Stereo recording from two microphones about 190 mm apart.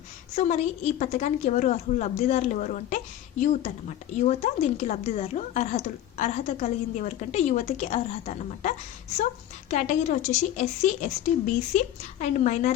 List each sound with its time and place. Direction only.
0.3 s speech: 35° left (ahead or behind)